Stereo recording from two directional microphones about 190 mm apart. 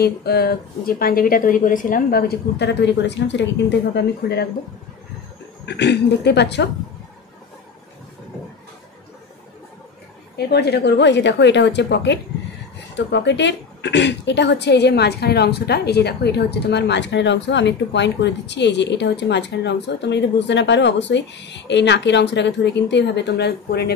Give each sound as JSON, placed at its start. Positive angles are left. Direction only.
{"t": 0.0, "sound": "speech", "side_deg": 55}
{"t": 5.7, "sound": "speech", "side_deg": 65}
{"t": 10.3, "sound": "speech", "side_deg": 60}